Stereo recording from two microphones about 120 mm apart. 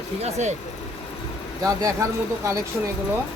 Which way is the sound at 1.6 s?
30° right (ahead or behind).